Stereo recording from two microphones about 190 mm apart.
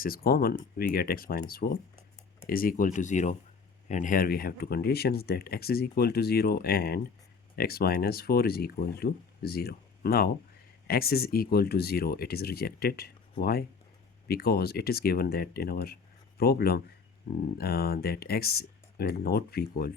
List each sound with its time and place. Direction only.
0.0 s speech: 50° left (ahead or behind)